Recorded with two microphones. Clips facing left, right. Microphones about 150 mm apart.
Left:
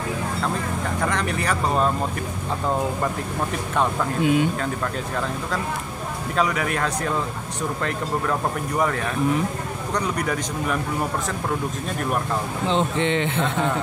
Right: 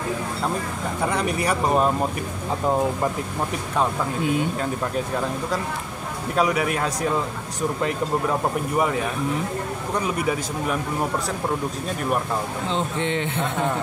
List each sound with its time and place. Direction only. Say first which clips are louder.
1.0 s speech: right 3 dB; 10° right (ahead or behind)
6.3 s speech: right 2 dB; 10° right (ahead or behind)
12.6 s speech: left 5 dB; 85° left